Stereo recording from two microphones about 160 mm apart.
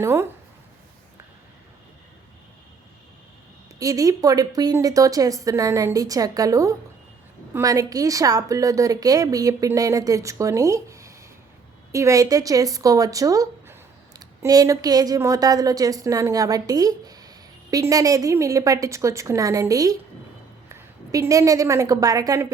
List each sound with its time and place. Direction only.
0.0 s speech: 15° right (ahead or behind)
3.8 s a woman's voice: 20° right (ahead or behind)